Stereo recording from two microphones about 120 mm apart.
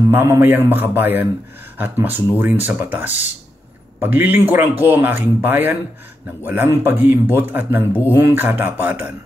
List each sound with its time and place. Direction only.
0.1 s speech: 20° right (ahead or behind)